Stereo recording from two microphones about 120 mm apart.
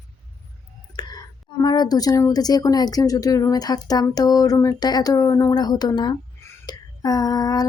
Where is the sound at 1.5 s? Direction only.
35° left (ahead or behind).